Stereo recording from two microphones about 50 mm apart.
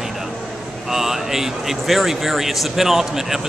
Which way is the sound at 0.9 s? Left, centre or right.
Centre.